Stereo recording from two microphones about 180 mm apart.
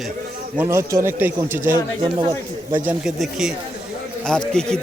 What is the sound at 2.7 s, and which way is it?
Speech, 10° right (ahead or behind).